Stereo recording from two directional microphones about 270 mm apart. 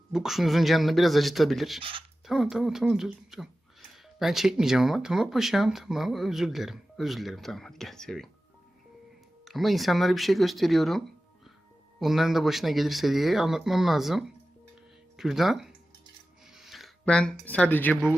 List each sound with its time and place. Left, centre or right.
0.1 s speech: centre
1.8 s speech: centre
2.2 s speech: centre
9.4 s speech: centre
16.5 s a sound: centre
17.4 s speech: centre